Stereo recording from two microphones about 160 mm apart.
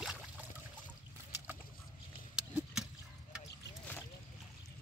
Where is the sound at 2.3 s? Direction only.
5° right (ahead or behind).